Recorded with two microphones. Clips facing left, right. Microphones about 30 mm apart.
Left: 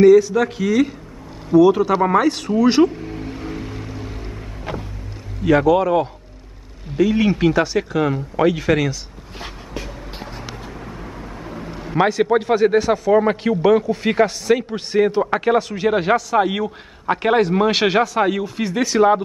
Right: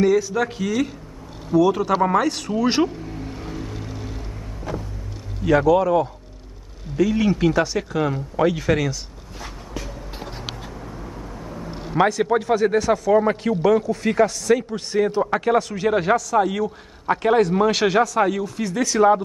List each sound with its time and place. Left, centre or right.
0.0 s a man's voice: centre
3.0 s music: left
3.6 s music: left
4.7 s vehicle: left
5.4 s a man's voice: centre
7.5 s speech: centre
10.9 s vehicle: left
12.0 s a man's voice: centre